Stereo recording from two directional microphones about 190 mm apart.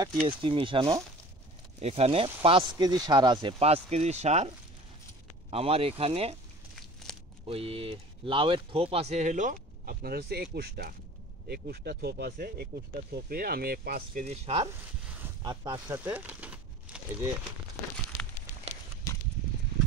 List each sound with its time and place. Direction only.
0.0 s speech: 25° right (ahead or behind)
5.5 s speech: 30° right (ahead or behind)
7.1 s a sound: centre (ahead or behind)
7.4 s speech: 30° right (ahead or behind); by 14.2 s 50° right (ahead or behind)
14.2 s speech: 35° right (ahead or behind)
15.4 s speech: 20° right (ahead or behind)
16.0 s a sound: 10° right (ahead or behind)